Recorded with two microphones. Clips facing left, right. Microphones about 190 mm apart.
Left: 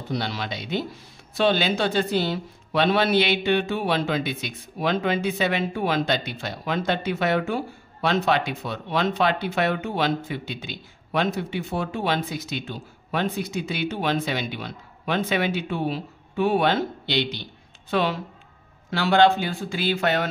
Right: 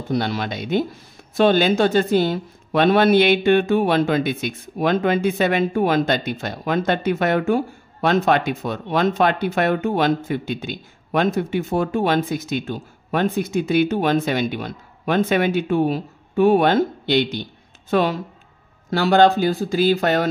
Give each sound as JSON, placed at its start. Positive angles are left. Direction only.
{"t": 0.1, "sound": "speech", "side_deg": -50}